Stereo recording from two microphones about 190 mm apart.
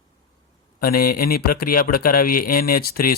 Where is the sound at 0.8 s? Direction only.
50° left (ahead or behind).